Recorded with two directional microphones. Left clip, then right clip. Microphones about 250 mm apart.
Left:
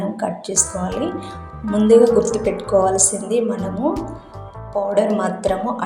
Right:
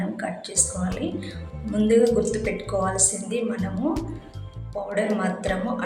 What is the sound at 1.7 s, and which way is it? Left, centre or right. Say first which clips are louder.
A woman's voice: left 7 dB; centre.